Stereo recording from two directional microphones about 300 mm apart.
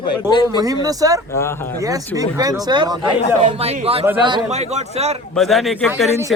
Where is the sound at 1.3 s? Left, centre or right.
Centre.